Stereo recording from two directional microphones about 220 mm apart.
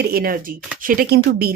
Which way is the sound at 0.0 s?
45° right (ahead or behind).